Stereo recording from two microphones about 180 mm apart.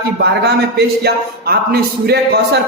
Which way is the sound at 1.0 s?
60° right (ahead or behind).